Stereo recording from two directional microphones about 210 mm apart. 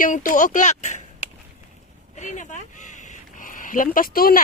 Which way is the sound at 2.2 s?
35° left (ahead or behind).